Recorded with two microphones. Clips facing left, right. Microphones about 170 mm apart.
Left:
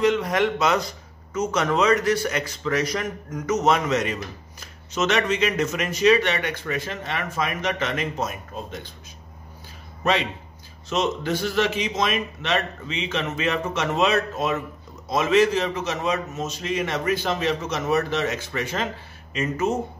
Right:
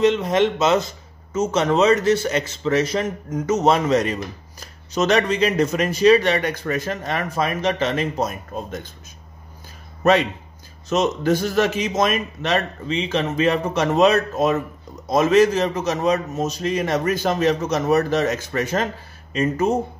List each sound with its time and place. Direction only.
0.0 s speech: 25° right (ahead or behind); by 8.8 s 45° right (ahead or behind)
10.9 s speech: 45° right (ahead or behind)